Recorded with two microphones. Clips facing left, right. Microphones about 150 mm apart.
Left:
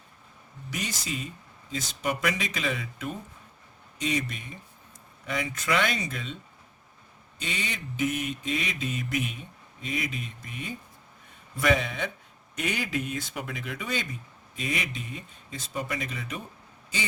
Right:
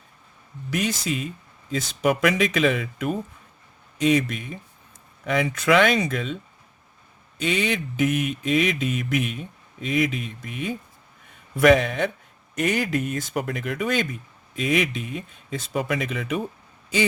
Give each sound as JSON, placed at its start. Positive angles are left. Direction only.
{"t": 0.7, "sound": "speech", "side_deg": -65}
{"t": 7.4, "sound": "speech", "side_deg": -80}
{"t": 11.5, "sound": "speech", "side_deg": -65}
{"t": 12.5, "sound": "speech", "side_deg": -50}